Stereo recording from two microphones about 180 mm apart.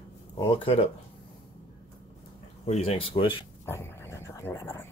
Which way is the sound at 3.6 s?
15° left (ahead or behind).